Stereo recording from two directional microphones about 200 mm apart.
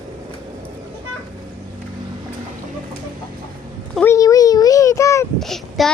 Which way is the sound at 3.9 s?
5° left (ahead or behind).